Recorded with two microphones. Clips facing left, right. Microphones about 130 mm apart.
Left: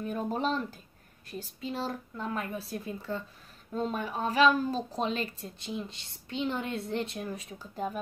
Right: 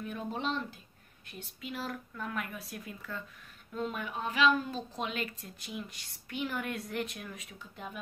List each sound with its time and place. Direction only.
0.0 s a woman's voice: 40° left (ahead or behind)